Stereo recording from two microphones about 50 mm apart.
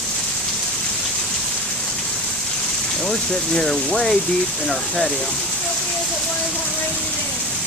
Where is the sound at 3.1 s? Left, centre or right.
Centre.